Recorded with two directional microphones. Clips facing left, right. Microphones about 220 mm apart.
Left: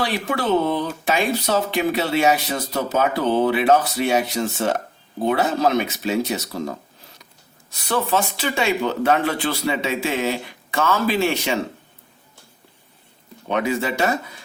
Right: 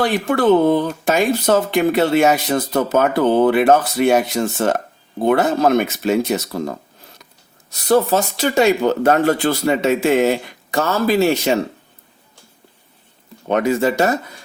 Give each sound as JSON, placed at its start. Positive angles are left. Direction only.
{"t": 0.0, "sound": "speech", "side_deg": -50}
{"t": 13.5, "sound": "speech", "side_deg": -45}